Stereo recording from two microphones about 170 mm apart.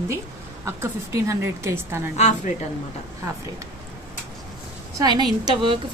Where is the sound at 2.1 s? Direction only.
45° left (ahead or behind).